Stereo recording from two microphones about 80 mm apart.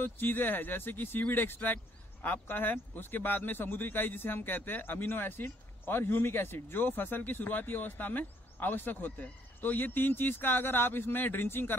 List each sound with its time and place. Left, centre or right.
0.0 s a man's voice: left